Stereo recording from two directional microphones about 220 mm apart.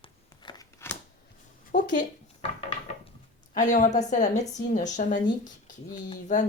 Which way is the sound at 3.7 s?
35° left (ahead or behind).